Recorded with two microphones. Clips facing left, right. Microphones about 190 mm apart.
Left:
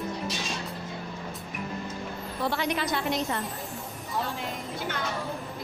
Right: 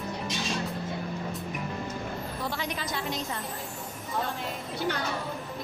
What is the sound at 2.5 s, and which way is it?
Speech, 65° left (ahead or behind).